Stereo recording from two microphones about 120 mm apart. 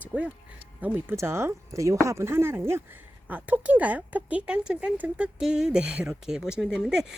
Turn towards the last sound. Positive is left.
turn(degrees=-5)  # may be behind; listen again after turning